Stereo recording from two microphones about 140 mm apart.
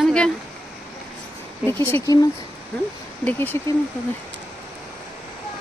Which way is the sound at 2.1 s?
25° left (ahead or behind).